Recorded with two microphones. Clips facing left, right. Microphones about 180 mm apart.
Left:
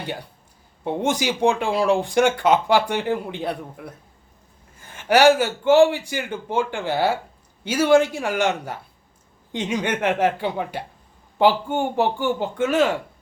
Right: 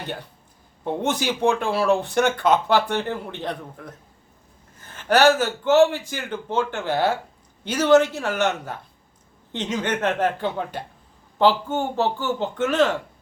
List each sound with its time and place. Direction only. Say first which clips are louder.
0.9 s speech: left 1 dB; 10° left (ahead or behind)